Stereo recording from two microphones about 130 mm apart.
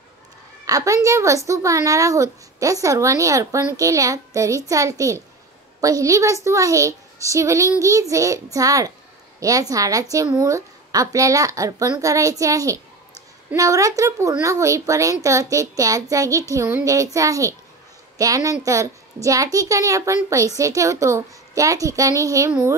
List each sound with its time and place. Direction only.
0.7 s a woman's voice: 25° right (ahead or behind)